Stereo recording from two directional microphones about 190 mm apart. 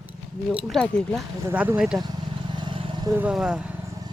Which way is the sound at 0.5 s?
Centre (ahead or behind).